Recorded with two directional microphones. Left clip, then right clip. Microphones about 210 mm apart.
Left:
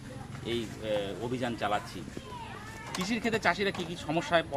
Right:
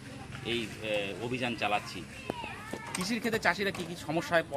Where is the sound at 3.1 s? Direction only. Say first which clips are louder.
Left 1 dB; 10° right (ahead or behind).